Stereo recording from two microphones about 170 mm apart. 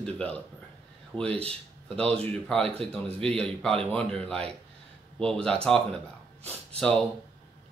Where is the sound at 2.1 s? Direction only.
5° left (ahead or behind).